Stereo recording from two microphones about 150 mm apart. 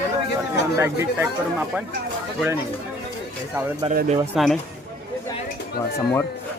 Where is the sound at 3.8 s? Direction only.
40° right (ahead or behind).